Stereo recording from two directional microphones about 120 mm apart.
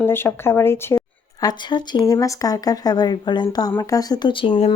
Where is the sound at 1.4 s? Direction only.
40° left (ahead or behind).